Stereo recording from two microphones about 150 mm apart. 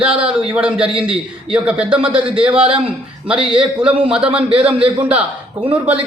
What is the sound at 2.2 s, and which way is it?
A man's voice, 35° right (ahead or behind).